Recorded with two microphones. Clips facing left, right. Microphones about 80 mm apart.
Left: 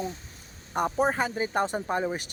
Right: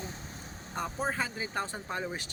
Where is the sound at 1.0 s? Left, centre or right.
Centre.